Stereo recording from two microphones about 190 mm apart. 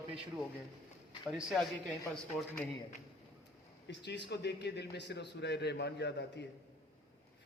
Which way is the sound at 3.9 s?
65° left (ahead or behind).